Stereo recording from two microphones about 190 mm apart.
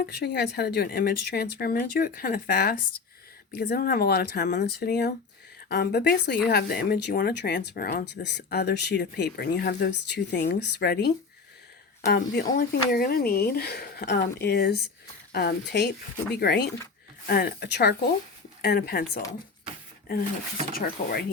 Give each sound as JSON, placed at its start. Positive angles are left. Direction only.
{"t": 0.0, "sound": "speech", "side_deg": 60}
{"t": 20.7, "sound": "speech", "side_deg": 50}